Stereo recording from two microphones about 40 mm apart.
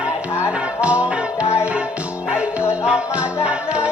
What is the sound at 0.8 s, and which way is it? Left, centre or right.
Music, right.